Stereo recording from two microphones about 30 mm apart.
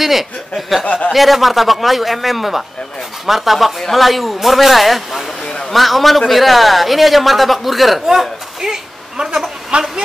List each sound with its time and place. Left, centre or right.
0.0 s speech: centre
0.8 s speech: left
1.1 s a man's voice: centre
8.5 s a sound: right
9.7 s speech: right